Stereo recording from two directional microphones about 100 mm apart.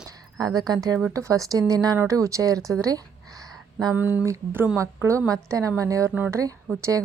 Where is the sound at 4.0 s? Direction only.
15° right (ahead or behind).